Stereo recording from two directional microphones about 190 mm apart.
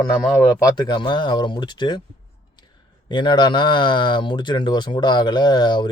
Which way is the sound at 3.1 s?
25° left (ahead or behind).